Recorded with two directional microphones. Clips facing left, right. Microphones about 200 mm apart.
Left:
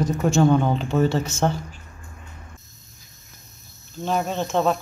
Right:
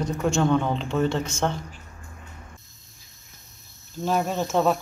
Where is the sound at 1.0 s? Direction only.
5° left (ahead or behind).